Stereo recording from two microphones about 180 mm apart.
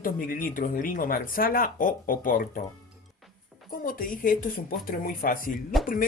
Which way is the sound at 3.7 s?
50° left (ahead or behind).